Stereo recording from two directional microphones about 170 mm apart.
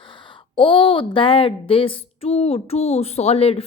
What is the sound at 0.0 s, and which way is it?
A woman's voice, 30° left (ahead or behind).